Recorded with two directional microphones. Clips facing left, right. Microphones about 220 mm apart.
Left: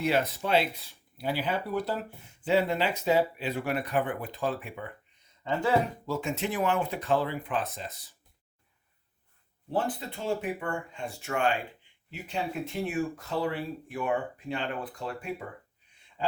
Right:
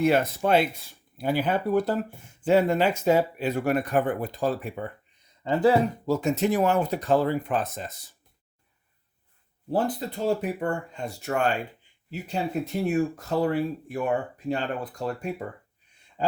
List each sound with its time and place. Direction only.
0.0 s speech: 45° right (ahead or behind)
9.6 s speech: 40° right (ahead or behind)